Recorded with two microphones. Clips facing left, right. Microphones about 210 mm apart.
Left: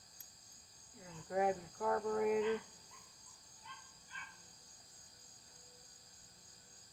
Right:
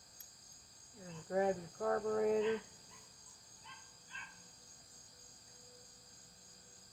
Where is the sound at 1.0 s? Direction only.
35° right (ahead or behind).